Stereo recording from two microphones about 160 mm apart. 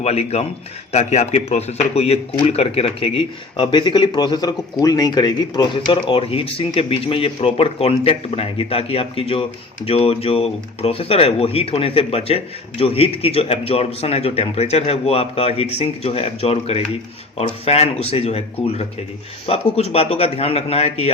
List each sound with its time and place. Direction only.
0.0 s speech: 40° left (ahead or behind)